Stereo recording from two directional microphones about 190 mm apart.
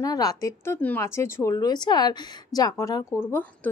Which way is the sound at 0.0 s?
20° left (ahead or behind).